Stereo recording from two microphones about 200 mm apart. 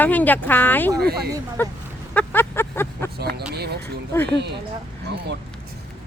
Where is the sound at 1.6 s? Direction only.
10° left (ahead or behind).